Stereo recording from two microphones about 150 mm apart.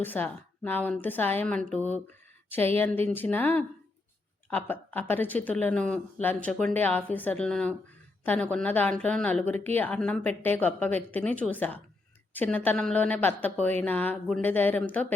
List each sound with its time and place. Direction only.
0.0 s a woman's voice: 10° left (ahead or behind)